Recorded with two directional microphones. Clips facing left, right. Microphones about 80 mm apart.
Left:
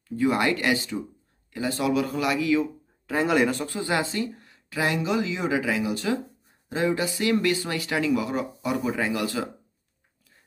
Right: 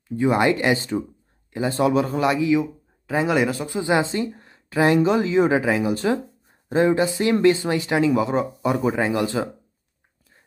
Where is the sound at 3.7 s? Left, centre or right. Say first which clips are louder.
Right 5 dB; centre.